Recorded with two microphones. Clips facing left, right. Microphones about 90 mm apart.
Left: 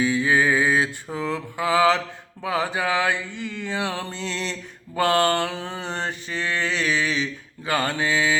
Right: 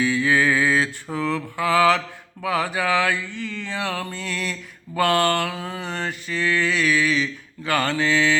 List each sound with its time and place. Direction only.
0.0 s music: 20° left (ahead or behind)
1.1 s mantra: 20° left (ahead or behind)